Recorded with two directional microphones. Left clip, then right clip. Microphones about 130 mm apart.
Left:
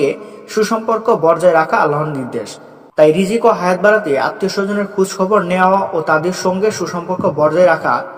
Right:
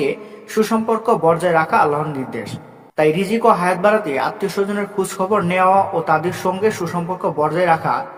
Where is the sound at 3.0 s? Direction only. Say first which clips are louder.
Left 5 dB; 20° left (ahead or behind).